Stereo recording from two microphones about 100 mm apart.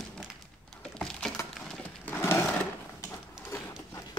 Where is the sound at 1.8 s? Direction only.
25° left (ahead or behind).